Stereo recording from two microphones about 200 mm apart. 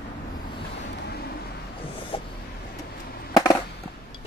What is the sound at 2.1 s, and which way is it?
Vehicle, 30° left (ahead or behind).